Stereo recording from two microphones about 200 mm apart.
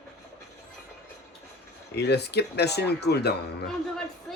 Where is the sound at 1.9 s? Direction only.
55° left (ahead or behind).